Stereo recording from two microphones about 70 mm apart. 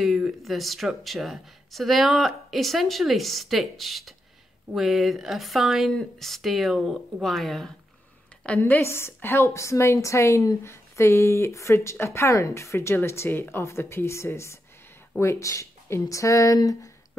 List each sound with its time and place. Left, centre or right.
0.4 s speech: centre
8.5 s a woman's voice: centre
8.8 s a woman's voice: left